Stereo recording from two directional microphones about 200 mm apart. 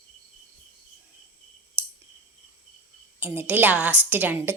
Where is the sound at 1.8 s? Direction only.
10° right (ahead or behind).